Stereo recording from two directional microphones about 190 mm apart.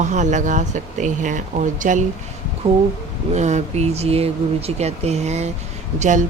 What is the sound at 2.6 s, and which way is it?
A woman's voice, 30° right (ahead or behind).